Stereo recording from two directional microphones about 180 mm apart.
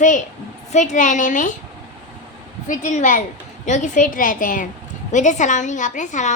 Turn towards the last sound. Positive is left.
turn(degrees=45)  # may be behind; listen again after turning